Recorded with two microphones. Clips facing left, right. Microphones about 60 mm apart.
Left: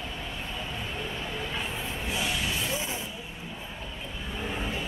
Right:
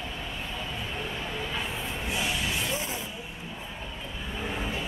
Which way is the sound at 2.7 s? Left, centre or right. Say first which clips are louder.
Even; right.